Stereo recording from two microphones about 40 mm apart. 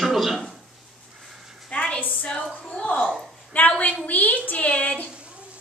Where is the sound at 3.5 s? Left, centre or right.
Left.